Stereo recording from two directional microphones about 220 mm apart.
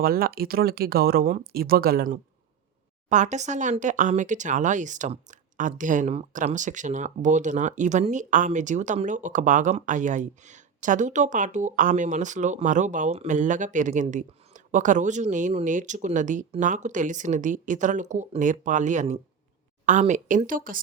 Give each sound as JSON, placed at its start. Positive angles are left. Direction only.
{"t": 0.0, "sound": "speech", "side_deg": -40}